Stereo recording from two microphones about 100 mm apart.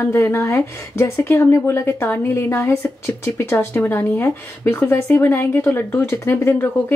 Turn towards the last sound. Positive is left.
turn(degrees=25)  # may be behind; listen again after turning